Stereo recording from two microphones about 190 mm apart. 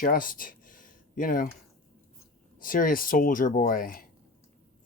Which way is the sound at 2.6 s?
45° left (ahead or behind).